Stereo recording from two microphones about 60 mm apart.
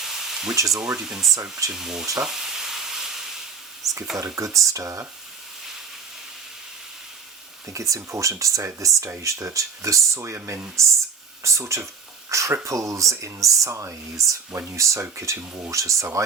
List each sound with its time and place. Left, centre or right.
0.0 s sizzle: centre
0.5 s speech: right
0.8 s speech: centre
2.1 s sizzle: centre
3.8 s a sound: centre
4.4 s speech: right
7.7 s speech: right